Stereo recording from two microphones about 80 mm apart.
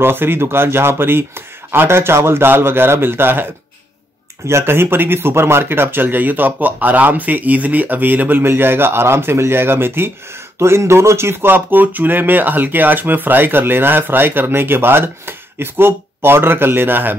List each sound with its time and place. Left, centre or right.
0.0 s speech: right
4.5 s speech: right